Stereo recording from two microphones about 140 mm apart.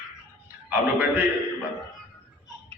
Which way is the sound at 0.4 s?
15° right (ahead or behind).